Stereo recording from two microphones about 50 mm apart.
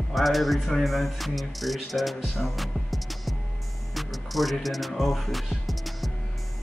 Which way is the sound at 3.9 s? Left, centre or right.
Centre.